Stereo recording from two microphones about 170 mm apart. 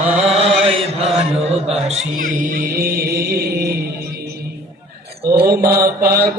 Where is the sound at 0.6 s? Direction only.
35° right (ahead or behind).